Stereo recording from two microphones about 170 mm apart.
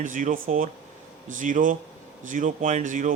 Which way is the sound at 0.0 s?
50° right (ahead or behind).